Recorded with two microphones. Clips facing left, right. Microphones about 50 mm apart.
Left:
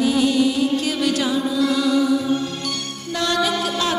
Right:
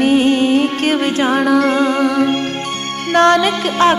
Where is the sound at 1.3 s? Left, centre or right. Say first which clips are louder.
Right 7 dB; right.